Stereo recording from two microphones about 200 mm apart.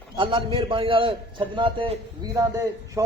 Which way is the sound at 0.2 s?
25° right (ahead or behind).